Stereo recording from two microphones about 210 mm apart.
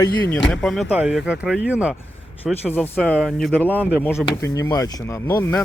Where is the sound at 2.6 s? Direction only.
10° left (ahead or behind).